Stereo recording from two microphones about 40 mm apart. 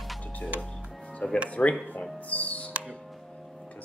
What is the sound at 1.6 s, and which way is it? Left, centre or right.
Speech, left.